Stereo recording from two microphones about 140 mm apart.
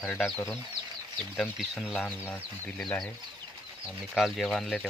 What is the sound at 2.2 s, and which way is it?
Speech, 10° left (ahead or behind).